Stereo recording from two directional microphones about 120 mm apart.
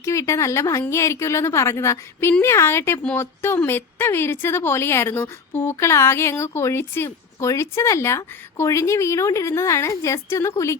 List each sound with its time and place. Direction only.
0.0 s a woman's voice: 25° left (ahead or behind)